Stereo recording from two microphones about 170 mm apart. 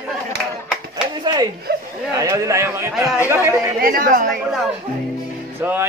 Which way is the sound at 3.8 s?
55° right (ahead or behind).